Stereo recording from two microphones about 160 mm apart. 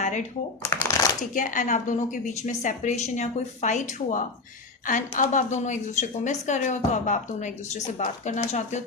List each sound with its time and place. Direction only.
0.0 s shuffling cards: 50° left (ahead or behind)
0.6 s shuffling cards: 15° left (ahead or behind)
1.3 s a woman's voice: 55° left (ahead or behind)